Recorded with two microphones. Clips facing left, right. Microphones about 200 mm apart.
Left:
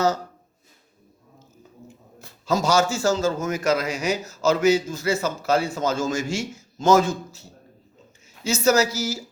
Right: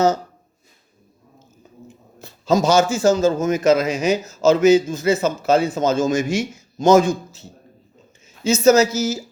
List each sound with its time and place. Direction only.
2.2 s a man's voice: 20° right (ahead or behind)
8.4 s a man's voice: 20° right (ahead or behind)